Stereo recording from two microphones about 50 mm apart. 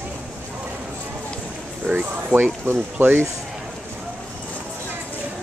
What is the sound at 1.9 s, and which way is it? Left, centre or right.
Speech, right.